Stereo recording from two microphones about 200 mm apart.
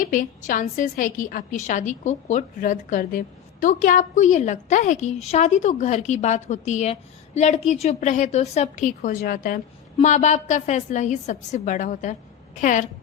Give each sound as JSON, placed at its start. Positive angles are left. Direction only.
{"t": 0.0, "sound": "a woman's voice", "side_deg": 40}